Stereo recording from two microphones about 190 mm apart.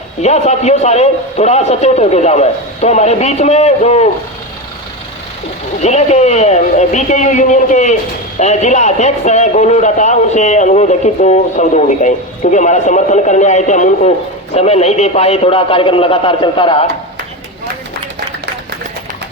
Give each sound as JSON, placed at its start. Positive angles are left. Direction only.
{"t": 0.2, "sound": "a man's voice", "side_deg": 35}
{"t": 5.8, "sound": "a man's voice", "side_deg": 35}